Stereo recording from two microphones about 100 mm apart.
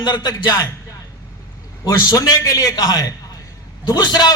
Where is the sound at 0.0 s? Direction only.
50° left (ahead or behind).